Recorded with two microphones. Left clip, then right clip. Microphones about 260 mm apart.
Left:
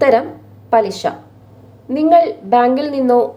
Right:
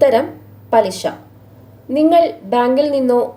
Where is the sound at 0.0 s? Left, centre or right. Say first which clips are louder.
Even; centre.